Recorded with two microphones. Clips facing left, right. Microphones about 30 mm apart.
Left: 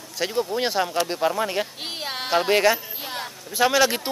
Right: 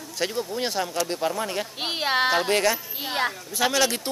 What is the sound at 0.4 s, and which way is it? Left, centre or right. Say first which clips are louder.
Speech: left 7 dB; centre.